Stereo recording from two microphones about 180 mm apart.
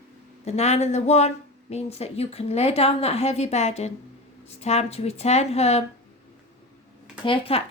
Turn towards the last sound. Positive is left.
turn(degrees=30)  # may be behind; listen again after turning